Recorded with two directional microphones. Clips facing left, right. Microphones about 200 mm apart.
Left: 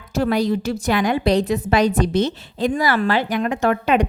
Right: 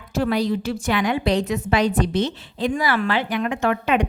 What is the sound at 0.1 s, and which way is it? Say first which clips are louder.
A woman's voice: left 2 dB; 45° left (ahead or behind).